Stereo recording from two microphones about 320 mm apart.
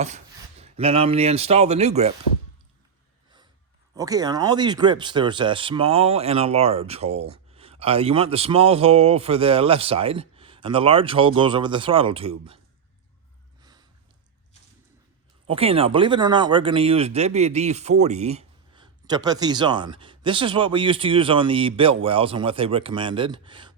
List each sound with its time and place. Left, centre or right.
0.6 s speech: centre
3.9 s speech: centre
13.6 s a sound: centre
15.4 s speech: centre